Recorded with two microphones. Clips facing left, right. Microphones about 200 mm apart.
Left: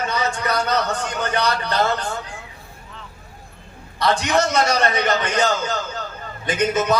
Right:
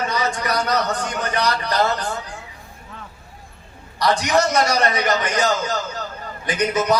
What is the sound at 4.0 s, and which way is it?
A man's voice, 25° left (ahead or behind).